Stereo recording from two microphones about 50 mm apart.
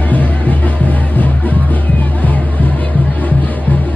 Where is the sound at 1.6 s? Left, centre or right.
Left.